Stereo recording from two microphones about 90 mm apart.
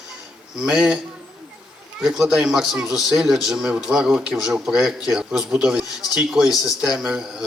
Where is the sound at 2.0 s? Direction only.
5° right (ahead or behind).